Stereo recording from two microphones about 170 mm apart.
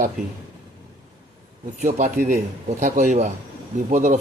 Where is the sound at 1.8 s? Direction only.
50° right (ahead or behind).